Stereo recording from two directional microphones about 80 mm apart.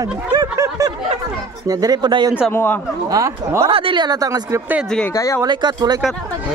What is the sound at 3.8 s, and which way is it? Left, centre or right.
Speech, right.